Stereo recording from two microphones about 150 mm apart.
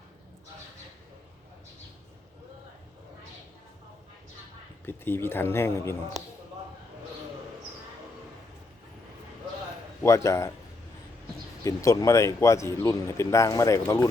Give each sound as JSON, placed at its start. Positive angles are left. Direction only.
{"t": 4.9, "sound": "speech", "side_deg": 15}
{"t": 10.0, "sound": "speech", "side_deg": 20}
{"t": 11.6, "sound": "speech", "side_deg": 20}